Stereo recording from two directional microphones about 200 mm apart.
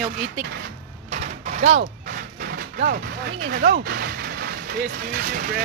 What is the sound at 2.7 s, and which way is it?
Speech, 50° right (ahead or behind).